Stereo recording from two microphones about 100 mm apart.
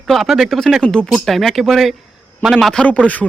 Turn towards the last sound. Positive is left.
turn(degrees=15)  # may be behind; listen again after turning